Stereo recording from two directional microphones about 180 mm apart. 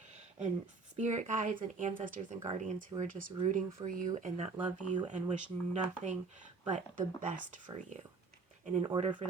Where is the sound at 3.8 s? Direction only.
25° right (ahead or behind).